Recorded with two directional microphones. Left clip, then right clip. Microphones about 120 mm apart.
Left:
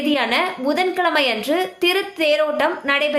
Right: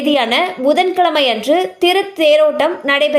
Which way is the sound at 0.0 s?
40° right (ahead or behind).